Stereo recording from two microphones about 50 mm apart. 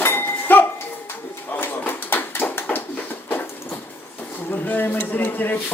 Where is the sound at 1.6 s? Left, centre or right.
Left.